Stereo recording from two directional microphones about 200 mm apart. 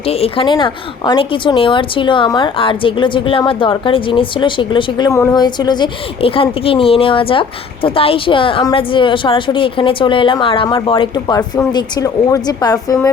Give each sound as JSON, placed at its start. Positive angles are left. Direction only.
{"t": 0.0, "sound": "speech", "side_deg": 30}